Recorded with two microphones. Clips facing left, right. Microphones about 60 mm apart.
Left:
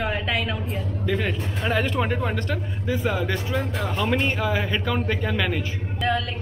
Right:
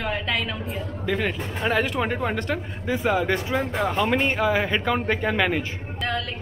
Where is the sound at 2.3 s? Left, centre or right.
Right.